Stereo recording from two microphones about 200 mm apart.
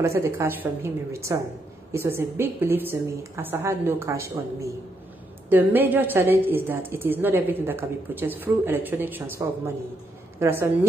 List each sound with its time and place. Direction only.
0.0 s a woman's voice: 15° right (ahead or behind)